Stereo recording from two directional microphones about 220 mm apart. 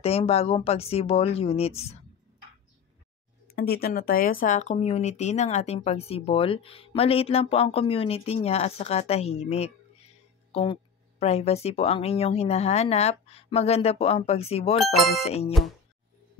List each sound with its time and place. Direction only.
0.0 s speech: 25° left (ahead or behind)
3.4 s speech: 45° left (ahead or behind); by 15.0 s 30° left (ahead or behind)
15.0 s speech: centre (ahead or behind)
15.2 s speech: 30° left (ahead or behind)